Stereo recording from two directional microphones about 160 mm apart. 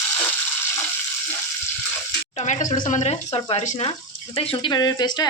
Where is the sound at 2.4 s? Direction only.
50° left (ahead or behind).